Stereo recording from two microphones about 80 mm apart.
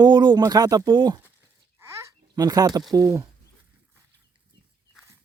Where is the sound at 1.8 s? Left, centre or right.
Right.